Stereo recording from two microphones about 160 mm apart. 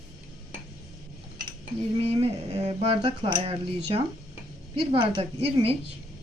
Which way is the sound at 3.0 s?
35° right (ahead or behind).